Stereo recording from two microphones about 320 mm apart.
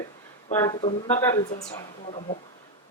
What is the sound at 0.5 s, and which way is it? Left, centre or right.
Speech, centre.